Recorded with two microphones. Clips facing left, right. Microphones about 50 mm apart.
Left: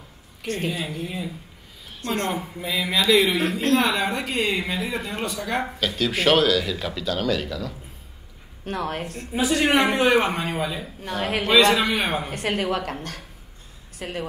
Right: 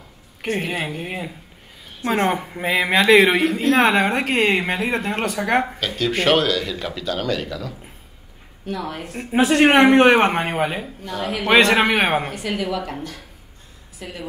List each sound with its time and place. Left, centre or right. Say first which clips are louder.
0.6 s a woman's voice: even; right
5.8 s speech: right 2 dB; centre
8.6 s a woman's voice: even; left
9.1 s speech: right 7 dB; right
9.4 s a woman's voice: right 6 dB; right
12.4 s a woman's voice: even; left